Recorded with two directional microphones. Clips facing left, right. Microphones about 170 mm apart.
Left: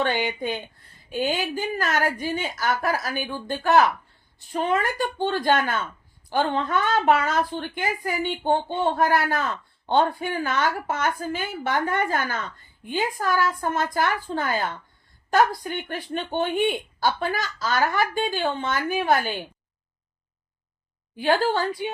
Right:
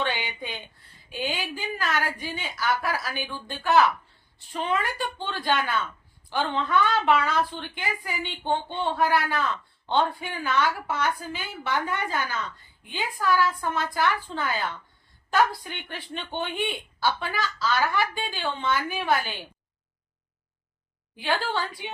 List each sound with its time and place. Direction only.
0.0 s speech: 45° left (ahead or behind)
21.2 s speech: 45° left (ahead or behind)